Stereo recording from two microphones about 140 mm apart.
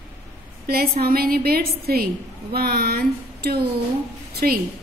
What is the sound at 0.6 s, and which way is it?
A woman's voice, 90° right.